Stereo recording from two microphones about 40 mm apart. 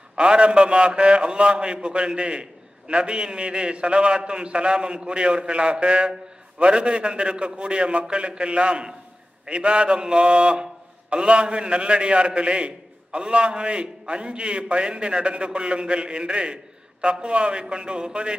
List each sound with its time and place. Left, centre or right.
0.1 s a man's voice: right